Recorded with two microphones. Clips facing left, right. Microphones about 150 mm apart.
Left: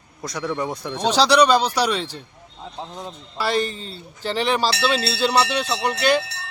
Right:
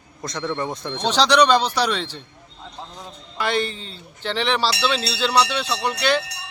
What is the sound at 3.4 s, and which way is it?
A man's voice, 40° left (ahead or behind).